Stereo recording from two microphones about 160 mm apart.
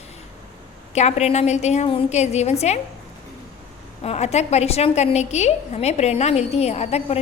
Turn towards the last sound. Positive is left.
turn(degrees=40)  # may be behind; listen again after turning